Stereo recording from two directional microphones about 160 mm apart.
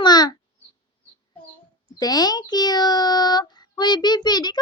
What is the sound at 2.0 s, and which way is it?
Speech, 25° left (ahead or behind).